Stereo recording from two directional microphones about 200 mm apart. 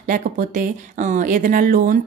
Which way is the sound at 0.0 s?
45° right (ahead or behind).